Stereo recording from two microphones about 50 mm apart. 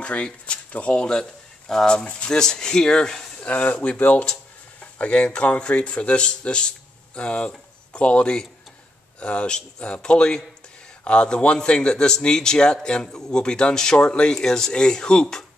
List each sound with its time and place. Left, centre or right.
0.0 s a man's voice: left
3.4 s a man's voice: left